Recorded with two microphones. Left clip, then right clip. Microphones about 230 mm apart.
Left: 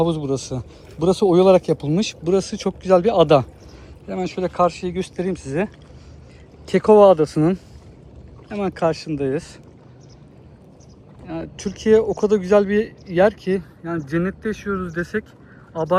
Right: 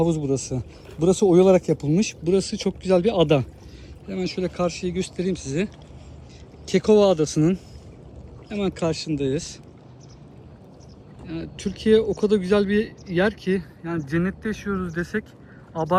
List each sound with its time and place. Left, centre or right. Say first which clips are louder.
0.5 s speech: left 1 dB; centre
11.3 s speech: left 3 dB; centre
13.8 s speech: left 2 dB; centre